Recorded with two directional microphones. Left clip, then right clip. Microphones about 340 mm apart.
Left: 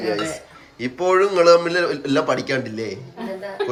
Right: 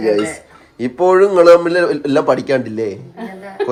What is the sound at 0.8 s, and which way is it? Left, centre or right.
Speech, centre.